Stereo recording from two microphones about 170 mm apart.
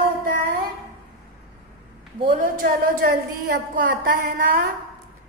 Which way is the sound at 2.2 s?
55° right (ahead or behind).